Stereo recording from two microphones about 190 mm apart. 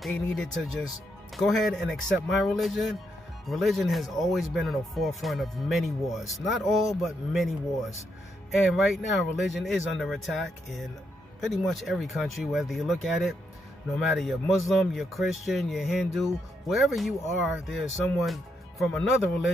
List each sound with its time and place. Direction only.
0.0 s speech: centre (ahead or behind)
9.4 s speech: centre (ahead or behind)